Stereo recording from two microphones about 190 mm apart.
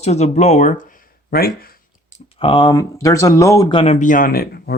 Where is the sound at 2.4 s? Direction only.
25° left (ahead or behind).